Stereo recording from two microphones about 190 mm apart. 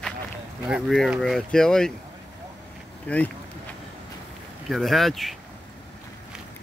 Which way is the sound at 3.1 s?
10° left (ahead or behind).